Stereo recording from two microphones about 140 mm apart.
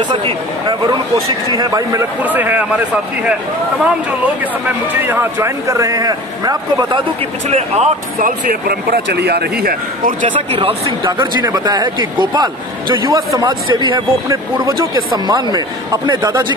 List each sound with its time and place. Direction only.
0.1 s a man's voice: 35° right (ahead or behind)
2.2 s speech: 10° right (ahead or behind)
5.0 s a man's voice: 15° right (ahead or behind)
7.4 s speech: 50° right (ahead or behind)
8.2 s speech: 90° right
9.7 s speech: 75° right (ahead or behind)
10.3 s speech: 40° right (ahead or behind)
11.1 s a man's voice: 30° right (ahead or behind)